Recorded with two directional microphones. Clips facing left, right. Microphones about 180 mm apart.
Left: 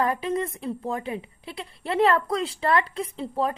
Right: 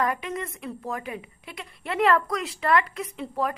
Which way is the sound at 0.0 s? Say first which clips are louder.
Left 3 dB; 30° left (ahead or behind).